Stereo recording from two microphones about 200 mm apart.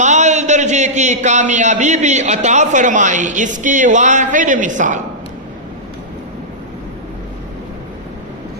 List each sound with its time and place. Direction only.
0.0 s a man's voice: 35° right (ahead or behind)